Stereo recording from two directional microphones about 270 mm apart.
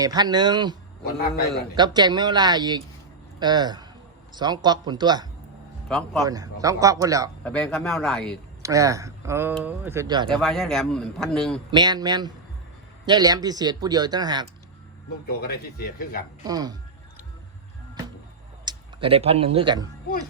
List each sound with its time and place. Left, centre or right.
0.0 s speech: centre
1.0 s speech: left
1.7 s speech: centre
5.9 s a man's voice: centre
6.2 s speech: centre
7.4 s a man's voice: centre
8.6 s speech: centre
10.4 s a man's voice: centre
11.7 s speech: centre
15.3 s speech: left
16.4 s speech: centre
18.6 s speech: centre